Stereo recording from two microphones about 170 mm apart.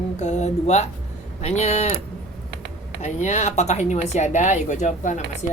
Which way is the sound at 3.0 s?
45° left (ahead or behind).